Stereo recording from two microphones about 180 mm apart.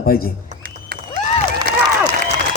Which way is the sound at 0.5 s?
55° right (ahead or behind).